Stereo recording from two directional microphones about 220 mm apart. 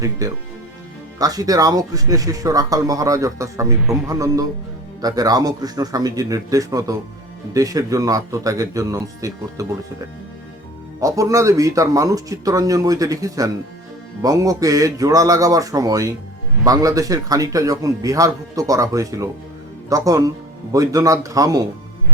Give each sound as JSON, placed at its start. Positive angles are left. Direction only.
{"t": 0.0, "sound": "a man's voice", "side_deg": -15}
{"t": 11.0, "sound": "a man's voice", "side_deg": -15}